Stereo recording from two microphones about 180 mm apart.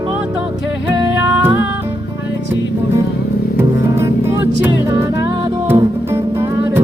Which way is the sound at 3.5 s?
15° right (ahead or behind).